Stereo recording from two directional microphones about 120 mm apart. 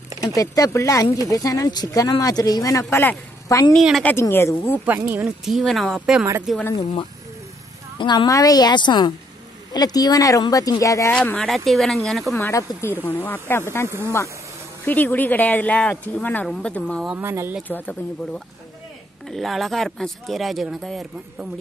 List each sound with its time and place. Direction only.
0.2 s speech: 30° left (ahead or behind)
4.8 s speech: 15° right (ahead or behind)
5.4 s speech: centre (ahead or behind)
8.0 s a woman's voice: 40° left (ahead or behind)
8.3 s speech: 30° left (ahead or behind)
11.1 s speech: 10° left (ahead or behind)
12.4 s speech: 20° left (ahead or behind)
13.8 s speech: 20° right (ahead or behind)
14.9 s speech: 15° left (ahead or behind)
17.2 s speech: 20° right (ahead or behind)
17.6 s speech: 15° left (ahead or behind)
19.2 s speech: centre (ahead or behind)